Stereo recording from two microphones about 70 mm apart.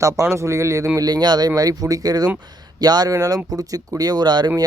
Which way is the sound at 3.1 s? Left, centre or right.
Right.